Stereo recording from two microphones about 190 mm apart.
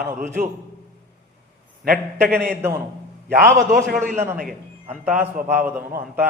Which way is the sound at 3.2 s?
50° right (ahead or behind).